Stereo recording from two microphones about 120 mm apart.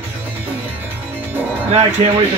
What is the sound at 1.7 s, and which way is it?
Speech, 65° right (ahead or behind).